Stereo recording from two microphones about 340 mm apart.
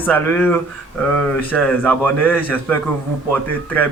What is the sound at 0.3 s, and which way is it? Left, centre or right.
A man's voice, centre.